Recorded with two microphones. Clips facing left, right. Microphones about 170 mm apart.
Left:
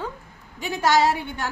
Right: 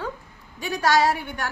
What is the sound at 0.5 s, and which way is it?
Speech, 20° left (ahead or behind).